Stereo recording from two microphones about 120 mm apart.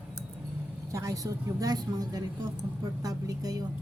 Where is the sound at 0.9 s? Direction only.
25° right (ahead or behind).